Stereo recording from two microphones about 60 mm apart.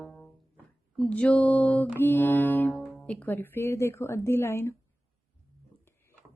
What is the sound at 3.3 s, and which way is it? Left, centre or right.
Music, left.